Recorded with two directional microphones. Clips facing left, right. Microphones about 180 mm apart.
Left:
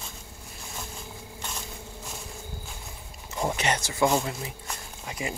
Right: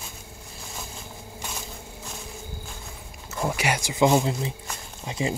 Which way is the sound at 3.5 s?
10° right (ahead or behind).